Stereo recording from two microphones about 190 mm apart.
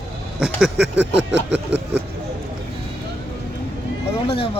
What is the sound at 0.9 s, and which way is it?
Speech, 65° right (ahead or behind).